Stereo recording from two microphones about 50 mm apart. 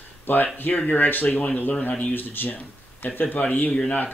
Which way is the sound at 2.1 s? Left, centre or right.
Left.